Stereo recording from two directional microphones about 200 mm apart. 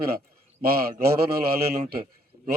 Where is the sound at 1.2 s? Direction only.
50° right (ahead or behind).